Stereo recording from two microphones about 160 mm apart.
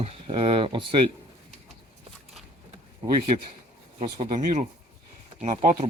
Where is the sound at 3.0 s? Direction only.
35° right (ahead or behind).